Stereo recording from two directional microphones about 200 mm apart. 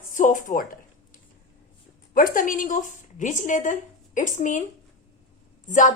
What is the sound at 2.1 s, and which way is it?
Speech, 45° left (ahead or behind).